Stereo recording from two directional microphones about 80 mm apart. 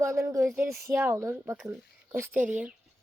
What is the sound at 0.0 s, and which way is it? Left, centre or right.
Speech, right.